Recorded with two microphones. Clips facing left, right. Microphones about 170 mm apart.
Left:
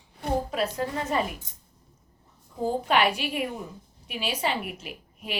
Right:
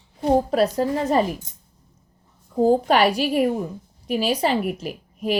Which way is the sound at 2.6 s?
40° right (ahead or behind).